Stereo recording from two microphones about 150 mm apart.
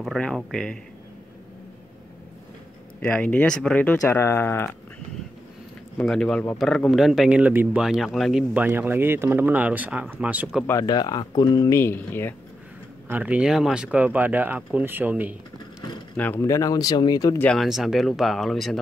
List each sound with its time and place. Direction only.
0.0 s a sound: centre (ahead or behind)
3.0 s speech: 10° left (ahead or behind)
5.9 s speech: 5° left (ahead or behind)
10.7 s speech: 25° left (ahead or behind)
13.1 s speech: 10° right (ahead or behind)
16.2 s speech: 15° left (ahead or behind)
17.4 s speech: 5° left (ahead or behind)